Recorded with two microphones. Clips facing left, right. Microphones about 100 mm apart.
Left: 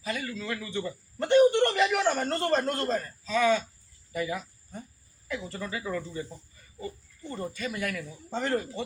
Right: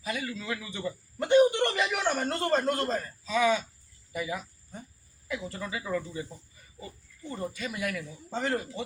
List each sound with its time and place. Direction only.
0.0 s a man's voice: 10° right (ahead or behind)
1.3 s a sound: 10° right (ahead or behind)
4.1 s cricket: 15° right (ahead or behind)
5.3 s a man's voice: 5° right (ahead or behind)
7.5 s a man's voice: 10° right (ahead or behind)